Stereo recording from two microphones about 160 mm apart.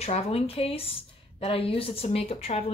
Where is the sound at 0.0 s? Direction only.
40° left (ahead or behind).